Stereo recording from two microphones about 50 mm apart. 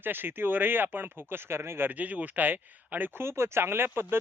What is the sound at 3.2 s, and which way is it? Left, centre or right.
Speech, right.